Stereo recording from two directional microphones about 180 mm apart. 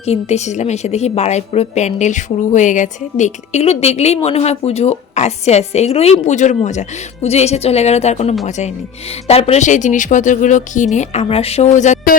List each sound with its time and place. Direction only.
0.0 s a woman's voice: 35° left (ahead or behind)